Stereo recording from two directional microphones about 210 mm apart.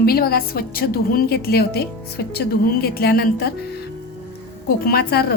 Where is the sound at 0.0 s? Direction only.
45° left (ahead or behind).